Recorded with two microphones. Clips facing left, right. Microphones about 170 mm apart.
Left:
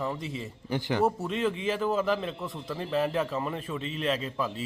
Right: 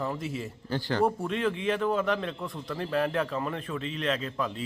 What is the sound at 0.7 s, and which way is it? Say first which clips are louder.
Speech: left 1 dB; 15° left (ahead or behind).